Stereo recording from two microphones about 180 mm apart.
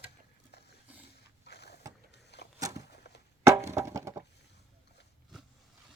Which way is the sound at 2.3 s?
70° left (ahead or behind).